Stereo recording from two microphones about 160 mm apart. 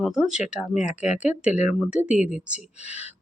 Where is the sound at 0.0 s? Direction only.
5° right (ahead or behind).